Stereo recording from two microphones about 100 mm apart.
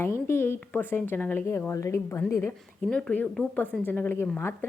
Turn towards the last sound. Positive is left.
turn(degrees=25)  # may be behind; listen again after turning